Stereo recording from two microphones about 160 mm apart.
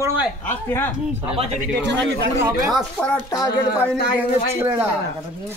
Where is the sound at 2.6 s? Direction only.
Centre (ahead or behind).